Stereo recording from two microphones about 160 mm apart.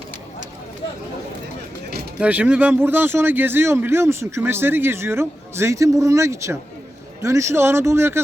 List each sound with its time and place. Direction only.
2.2 s speech: 10° right (ahead or behind)